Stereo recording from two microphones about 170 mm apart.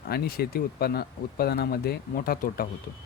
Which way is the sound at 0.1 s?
65° left (ahead or behind).